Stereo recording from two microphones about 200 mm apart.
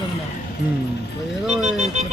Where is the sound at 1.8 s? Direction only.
35° right (ahead or behind).